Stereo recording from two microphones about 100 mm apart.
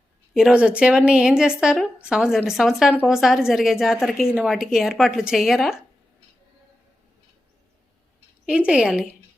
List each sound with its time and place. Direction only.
0.3 s a woman's voice: 10° right (ahead or behind)
8.4 s a woman's voice: 10° right (ahead or behind)